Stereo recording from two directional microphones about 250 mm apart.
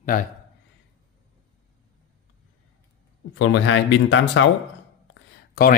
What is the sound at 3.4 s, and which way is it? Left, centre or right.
Speech, left.